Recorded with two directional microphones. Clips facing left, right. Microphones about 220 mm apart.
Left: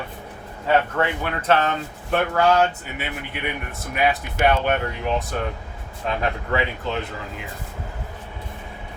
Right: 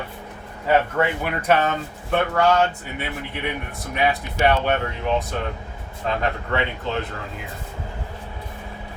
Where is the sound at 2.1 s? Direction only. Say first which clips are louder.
Even; 5° left (ahead or behind).